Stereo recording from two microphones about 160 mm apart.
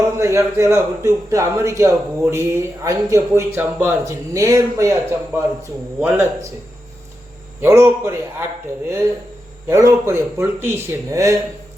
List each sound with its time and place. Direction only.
0.2 s a man's voice: 15° right (ahead or behind)
7.6 s a man's voice: 15° right (ahead or behind)
9.6 s a man's voice: 15° right (ahead or behind)